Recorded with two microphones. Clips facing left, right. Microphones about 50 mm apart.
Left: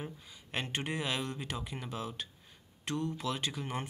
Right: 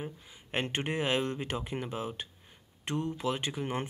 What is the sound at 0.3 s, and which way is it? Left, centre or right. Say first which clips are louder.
Speech: right 4 dB; right.